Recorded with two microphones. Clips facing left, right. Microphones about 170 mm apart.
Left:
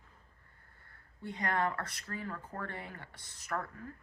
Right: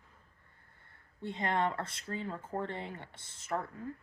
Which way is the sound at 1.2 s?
25° right (ahead or behind).